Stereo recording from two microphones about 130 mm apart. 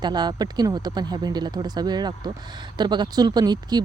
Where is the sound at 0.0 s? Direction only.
35° right (ahead or behind).